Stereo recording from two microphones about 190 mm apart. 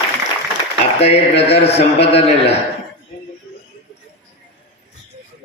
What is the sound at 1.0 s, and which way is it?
Speech, 35° left (ahead or behind).